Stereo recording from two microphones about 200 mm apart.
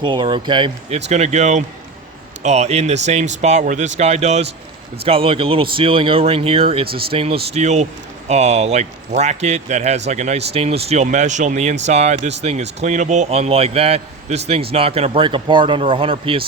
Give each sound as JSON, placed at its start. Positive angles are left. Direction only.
{"t": 0.0, "sound": "a man's voice", "side_deg": -25}